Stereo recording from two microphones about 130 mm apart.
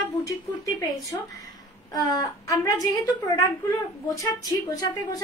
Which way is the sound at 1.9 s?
30° left (ahead or behind).